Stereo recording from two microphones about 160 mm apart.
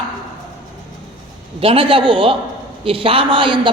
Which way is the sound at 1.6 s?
35° right (ahead or behind).